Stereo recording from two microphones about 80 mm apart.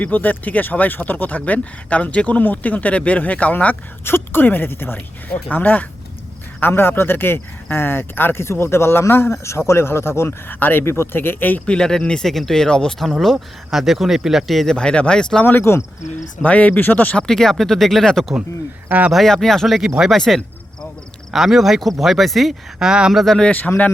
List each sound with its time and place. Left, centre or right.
0.0 s speech: left
15.4 s speech: left
16.4 s speech: centre
17.2 s speech: centre
18.9 s speech: centre
19.1 s speech: centre
23.2 s speech: centre
23.5 s speech: left